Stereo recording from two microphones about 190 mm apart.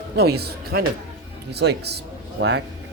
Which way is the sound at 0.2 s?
55° right (ahead or behind).